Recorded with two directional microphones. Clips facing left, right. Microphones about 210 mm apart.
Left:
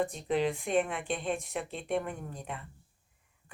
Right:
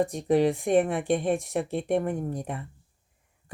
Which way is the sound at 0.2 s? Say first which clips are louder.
Right 7 dB; 45° right (ahead or behind).